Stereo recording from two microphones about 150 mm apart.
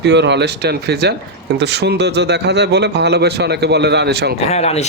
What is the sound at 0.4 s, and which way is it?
Speech, 90° right.